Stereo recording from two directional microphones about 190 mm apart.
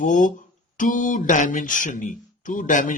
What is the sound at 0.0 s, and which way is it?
Speech, 45° left (ahead or behind).